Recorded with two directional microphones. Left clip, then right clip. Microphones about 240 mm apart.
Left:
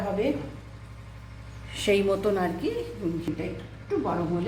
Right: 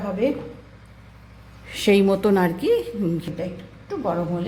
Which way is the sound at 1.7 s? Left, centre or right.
Right.